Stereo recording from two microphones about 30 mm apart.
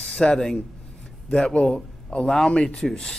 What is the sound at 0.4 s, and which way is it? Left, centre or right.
Speech, centre.